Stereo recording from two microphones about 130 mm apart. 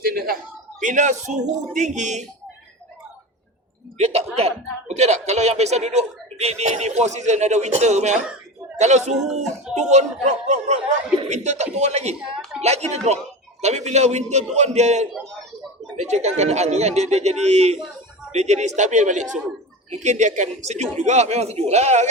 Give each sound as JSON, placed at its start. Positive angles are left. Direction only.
{"t": 0.8, "sound": "speech", "side_deg": -70}
{"t": 3.9, "sound": "speech", "side_deg": -50}